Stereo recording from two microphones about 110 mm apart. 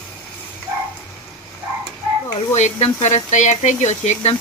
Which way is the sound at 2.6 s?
80° left.